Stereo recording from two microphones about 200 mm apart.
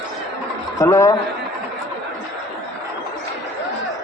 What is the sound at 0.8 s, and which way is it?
Speech, 15° left (ahead or behind).